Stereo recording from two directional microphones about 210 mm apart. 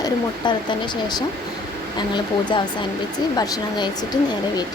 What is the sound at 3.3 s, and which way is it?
Speech, 20° left (ahead or behind).